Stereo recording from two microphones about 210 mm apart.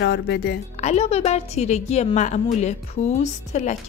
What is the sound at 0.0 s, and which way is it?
Speech, 55° left (ahead or behind).